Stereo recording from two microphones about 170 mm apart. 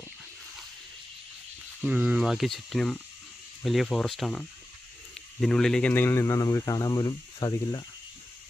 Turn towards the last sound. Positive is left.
turn(degrees=25)  # may be behind; listen again after turning